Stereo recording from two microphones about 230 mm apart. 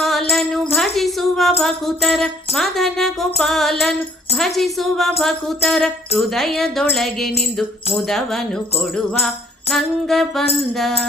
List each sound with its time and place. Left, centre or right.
0.0 s jingle bell: centre
0.8 s tambourine: centre
1.6 s music: centre